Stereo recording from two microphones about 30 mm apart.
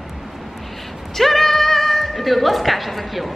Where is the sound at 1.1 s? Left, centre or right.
Centre.